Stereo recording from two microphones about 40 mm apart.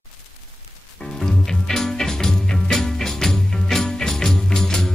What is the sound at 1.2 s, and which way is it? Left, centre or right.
Music, centre.